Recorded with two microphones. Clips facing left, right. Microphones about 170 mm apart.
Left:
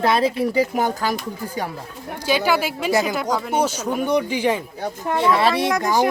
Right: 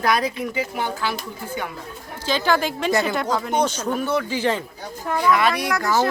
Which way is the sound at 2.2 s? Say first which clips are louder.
Left 1 dB; 10° left (ahead or behind).